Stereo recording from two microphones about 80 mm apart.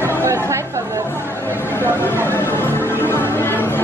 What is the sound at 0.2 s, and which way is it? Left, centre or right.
Chatter, right.